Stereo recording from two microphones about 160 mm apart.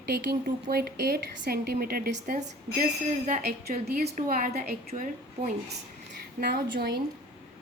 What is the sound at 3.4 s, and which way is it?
Speech, 80° right.